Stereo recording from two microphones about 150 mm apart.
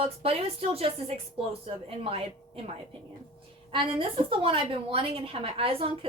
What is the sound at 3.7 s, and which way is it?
A woman's voice, 35° right (ahead or behind).